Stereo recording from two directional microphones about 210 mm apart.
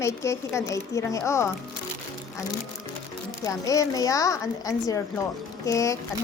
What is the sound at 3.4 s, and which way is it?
Speech, 15° left (ahead or behind).